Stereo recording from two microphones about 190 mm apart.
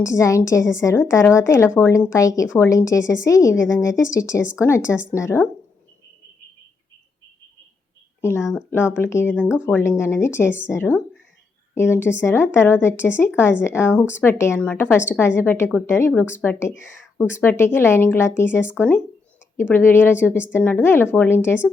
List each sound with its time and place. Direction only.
0.0 s a woman's voice: 15° left (ahead or behind)
8.2 s a woman's voice: 15° left (ahead or behind)
9.3 s speech: 5° right (ahead or behind)
9.6 s a woman's voice: 10° left (ahead or behind)